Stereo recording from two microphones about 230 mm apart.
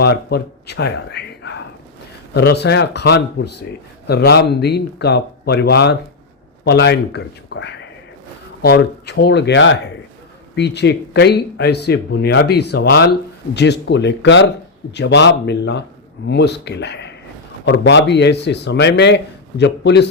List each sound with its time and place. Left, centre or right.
0.0 s speech: left